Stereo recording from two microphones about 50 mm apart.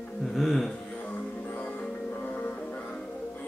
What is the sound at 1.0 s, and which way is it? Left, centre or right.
Music, left.